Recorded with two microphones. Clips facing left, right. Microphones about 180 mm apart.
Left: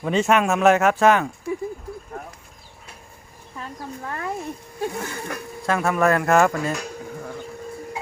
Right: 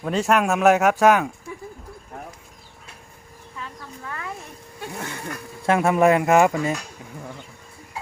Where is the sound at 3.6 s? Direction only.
40° left (ahead or behind).